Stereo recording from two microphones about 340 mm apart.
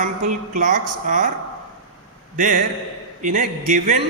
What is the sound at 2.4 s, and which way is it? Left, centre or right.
A man's voice, right.